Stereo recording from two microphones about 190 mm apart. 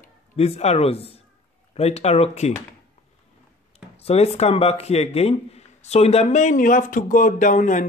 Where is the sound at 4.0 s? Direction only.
30° left (ahead or behind).